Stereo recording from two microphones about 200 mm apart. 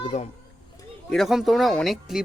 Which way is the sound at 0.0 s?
30° left (ahead or behind).